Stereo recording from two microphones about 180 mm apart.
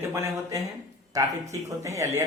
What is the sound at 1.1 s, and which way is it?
Speech, 20° right (ahead or behind).